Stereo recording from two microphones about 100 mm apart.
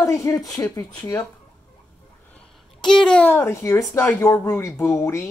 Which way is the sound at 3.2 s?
25° left (ahead or behind).